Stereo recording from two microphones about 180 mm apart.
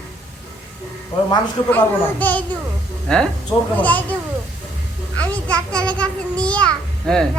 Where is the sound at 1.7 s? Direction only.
10° left (ahead or behind).